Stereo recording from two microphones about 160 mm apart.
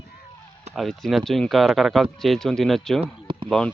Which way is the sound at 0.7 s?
Centre (ahead or behind).